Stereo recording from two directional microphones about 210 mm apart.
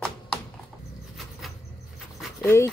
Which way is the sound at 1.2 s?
Centre (ahead or behind).